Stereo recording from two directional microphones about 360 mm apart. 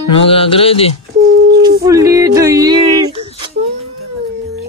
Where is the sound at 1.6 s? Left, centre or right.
Centre.